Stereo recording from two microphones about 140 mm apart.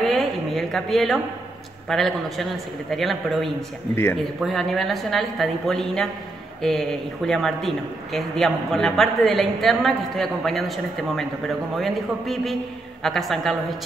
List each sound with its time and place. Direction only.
0.0 s a sound: centre (ahead or behind)
1.9 s speech: centre (ahead or behind)
3.9 s speech: 15° left (ahead or behind)
4.4 s speech: centre (ahead or behind)